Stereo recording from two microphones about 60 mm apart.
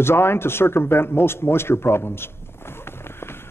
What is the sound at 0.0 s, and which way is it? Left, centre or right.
A man's voice, left.